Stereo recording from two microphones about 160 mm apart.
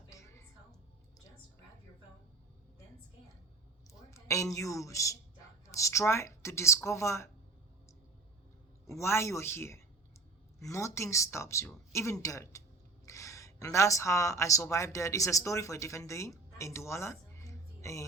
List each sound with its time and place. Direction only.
0.1 s music: 20° left (ahead or behind)
4.1 s a woman's voice: 20° left (ahead or behind)
8.9 s speech: 15° left (ahead or behind)